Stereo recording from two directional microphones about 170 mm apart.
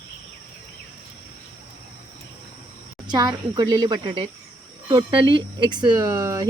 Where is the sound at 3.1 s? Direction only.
25° right (ahead or behind).